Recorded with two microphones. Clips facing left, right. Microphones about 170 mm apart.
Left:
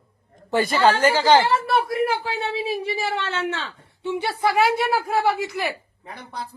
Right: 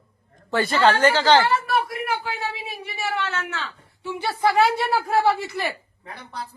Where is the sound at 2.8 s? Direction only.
30° left (ahead or behind).